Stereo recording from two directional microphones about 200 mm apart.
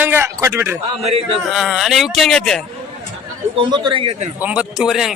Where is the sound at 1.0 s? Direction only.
30° right (ahead or behind).